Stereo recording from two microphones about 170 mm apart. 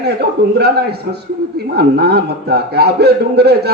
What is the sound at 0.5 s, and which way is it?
A man's voice, 70° right (ahead or behind).